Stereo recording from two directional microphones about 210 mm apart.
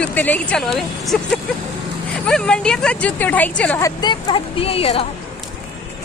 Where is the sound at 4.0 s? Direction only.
25° left (ahead or behind).